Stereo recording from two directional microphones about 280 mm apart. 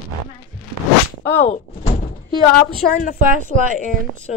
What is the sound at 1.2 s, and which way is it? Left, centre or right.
Speech, centre.